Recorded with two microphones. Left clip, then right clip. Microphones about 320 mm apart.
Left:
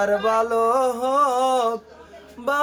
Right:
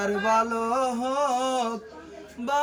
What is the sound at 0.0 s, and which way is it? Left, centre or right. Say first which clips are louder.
Music: left 4 dB; left.